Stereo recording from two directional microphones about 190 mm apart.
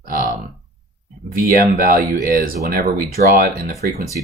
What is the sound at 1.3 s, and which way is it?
Speech, 45° right (ahead or behind).